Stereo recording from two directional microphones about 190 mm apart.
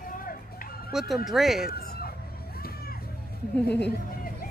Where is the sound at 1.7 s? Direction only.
55° left (ahead or behind).